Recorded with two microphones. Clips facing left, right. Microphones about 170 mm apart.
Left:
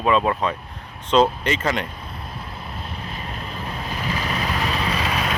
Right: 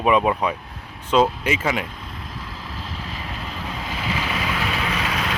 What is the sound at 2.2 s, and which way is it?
Vehicle, 90° right.